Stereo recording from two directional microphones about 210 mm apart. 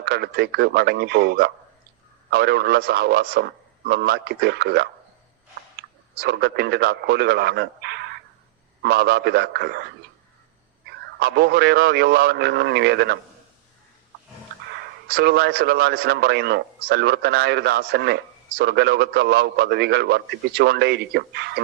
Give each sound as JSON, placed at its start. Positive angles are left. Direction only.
{"t": 0.0, "sound": "a man's voice", "side_deg": -50}
{"t": 6.1, "sound": "a man's voice", "side_deg": -50}
{"t": 15.1, "sound": "a man's voice", "side_deg": -50}